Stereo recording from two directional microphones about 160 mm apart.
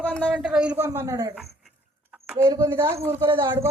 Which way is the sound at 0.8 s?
20° right (ahead or behind).